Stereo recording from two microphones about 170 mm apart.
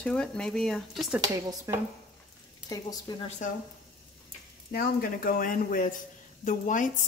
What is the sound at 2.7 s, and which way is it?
Speech, 25° left (ahead or behind).